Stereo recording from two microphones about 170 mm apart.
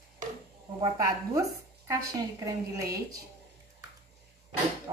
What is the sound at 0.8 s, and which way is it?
Speech, 20° right (ahead or behind).